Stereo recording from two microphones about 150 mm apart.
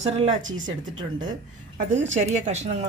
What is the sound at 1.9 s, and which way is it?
Speech, 50° right (ahead or behind).